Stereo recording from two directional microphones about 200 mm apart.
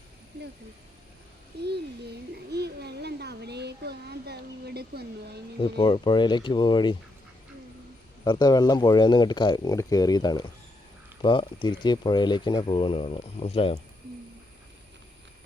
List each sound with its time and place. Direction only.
1.6 s a child's voice: 55° right (ahead or behind)
5.6 s speech: 25° left (ahead or behind)
8.2 s speech: 20° left (ahead or behind)